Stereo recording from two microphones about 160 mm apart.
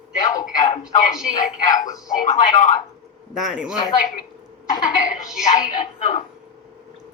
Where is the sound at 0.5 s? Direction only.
50° left (ahead or behind).